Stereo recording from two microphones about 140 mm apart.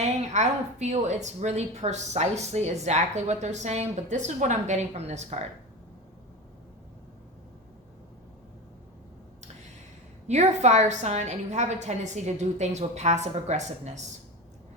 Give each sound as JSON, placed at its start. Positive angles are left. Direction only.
{"t": 0.3, "sound": "a woman's voice", "side_deg": -55}
{"t": 10.2, "sound": "a woman's voice", "side_deg": -55}